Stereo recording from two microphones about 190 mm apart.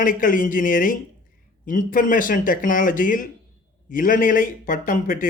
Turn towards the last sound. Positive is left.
turn(degrees=45)  # may be behind; listen again after turning